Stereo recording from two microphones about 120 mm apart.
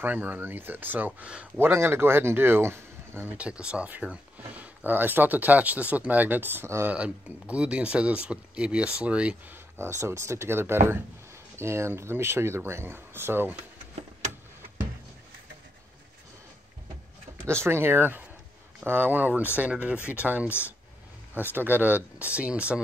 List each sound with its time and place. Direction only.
0.0 s speech: 15° right (ahead or behind)
1.7 s speech: 20° right (ahead or behind)
17.5 s speech: 20° right (ahead or behind)
20.4 s speech: 20° left (ahead or behind)
21.4 s speech: 15° right (ahead or behind)